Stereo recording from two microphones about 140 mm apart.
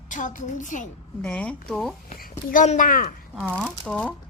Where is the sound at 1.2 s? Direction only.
10° left (ahead or behind).